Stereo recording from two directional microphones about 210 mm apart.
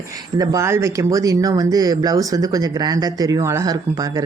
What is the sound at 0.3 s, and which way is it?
Speech, 15° right (ahead or behind).